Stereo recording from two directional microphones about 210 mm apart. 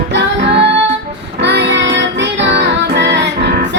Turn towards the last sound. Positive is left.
turn(degrees=-55)  # may be behind; listen again after turning